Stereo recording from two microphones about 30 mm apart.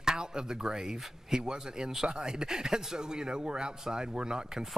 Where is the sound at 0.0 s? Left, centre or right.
Right.